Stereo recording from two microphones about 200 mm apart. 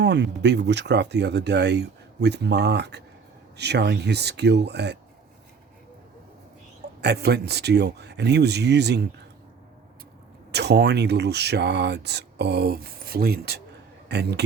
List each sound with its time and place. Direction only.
0.0 s speech: 60° right (ahead or behind)
7.0 s speech: 55° right (ahead or behind)
10.5 s speech: 55° right (ahead or behind)